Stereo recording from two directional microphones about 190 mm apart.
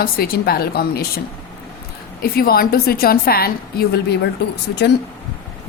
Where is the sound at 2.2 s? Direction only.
50° left (ahead or behind).